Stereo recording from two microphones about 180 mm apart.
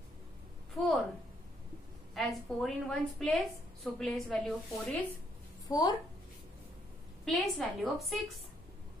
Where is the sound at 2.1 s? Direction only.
Centre (ahead or behind).